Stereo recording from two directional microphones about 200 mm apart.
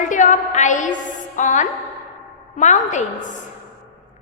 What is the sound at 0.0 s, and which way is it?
A woman's voice, 40° left (ahead or behind).